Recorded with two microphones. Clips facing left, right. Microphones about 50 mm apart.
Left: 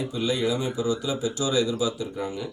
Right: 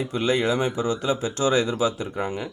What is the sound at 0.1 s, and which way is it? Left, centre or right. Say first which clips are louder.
Speech: right 4 dB; right.